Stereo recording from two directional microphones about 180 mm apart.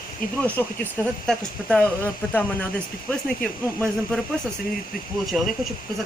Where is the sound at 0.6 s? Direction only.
10° left (ahead or behind).